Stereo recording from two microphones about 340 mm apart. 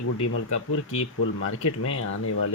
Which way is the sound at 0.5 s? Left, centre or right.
Left.